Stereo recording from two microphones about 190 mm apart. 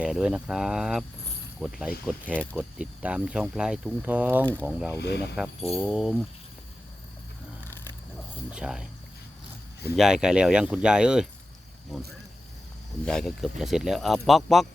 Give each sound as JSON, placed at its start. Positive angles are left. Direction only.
{"t": 0.0, "sound": "speech", "side_deg": -5}
{"t": 2.7, "sound": "speech", "side_deg": -5}
{"t": 4.9, "sound": "speech", "side_deg": 60}
{"t": 5.7, "sound": "speech", "side_deg": 0}
{"t": 8.4, "sound": "speech", "side_deg": -5}
{"t": 9.9, "sound": "speech", "side_deg": -5}
{"t": 13.1, "sound": "speech", "side_deg": 0}